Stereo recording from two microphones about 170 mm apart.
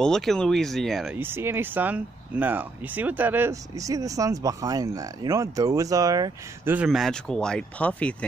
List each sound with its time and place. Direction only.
0.0 s speech: centre (ahead or behind)
1.1 s speech: 15° right (ahead or behind)
6.7 s speech: 5° right (ahead or behind)